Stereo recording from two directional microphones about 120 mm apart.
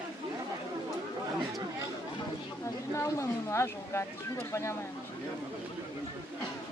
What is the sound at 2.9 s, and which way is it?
Speech, 20° left (ahead or behind).